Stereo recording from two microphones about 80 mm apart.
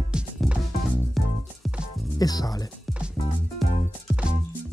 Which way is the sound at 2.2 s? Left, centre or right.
Left.